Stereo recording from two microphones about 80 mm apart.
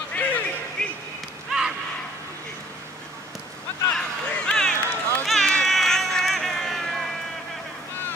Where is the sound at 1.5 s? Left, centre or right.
Centre.